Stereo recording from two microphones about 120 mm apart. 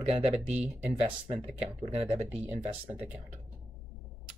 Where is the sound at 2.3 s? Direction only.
15° right (ahead or behind).